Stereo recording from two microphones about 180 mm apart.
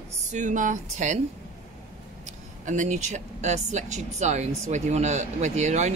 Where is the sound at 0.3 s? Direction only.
45° right (ahead or behind).